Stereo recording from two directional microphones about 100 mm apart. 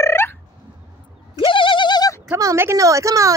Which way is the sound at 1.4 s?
55° left (ahead or behind).